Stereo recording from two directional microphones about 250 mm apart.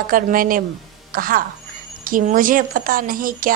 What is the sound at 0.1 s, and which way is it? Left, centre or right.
Speech, right.